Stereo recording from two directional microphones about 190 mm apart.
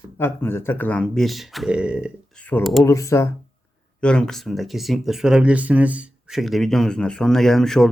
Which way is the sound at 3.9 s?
5° left (ahead or behind).